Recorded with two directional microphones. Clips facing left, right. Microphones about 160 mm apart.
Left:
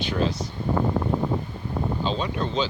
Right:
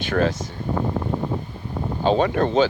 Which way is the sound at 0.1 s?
50° right (ahead or behind).